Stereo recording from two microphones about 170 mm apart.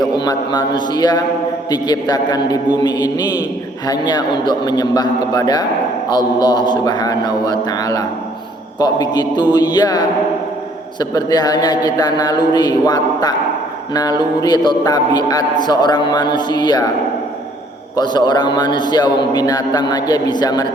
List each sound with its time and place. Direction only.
0.0 s a man's voice: 25° left (ahead or behind)
11.1 s a man's voice: 25° left (ahead or behind)
17.9 s a man's voice: 25° left (ahead or behind)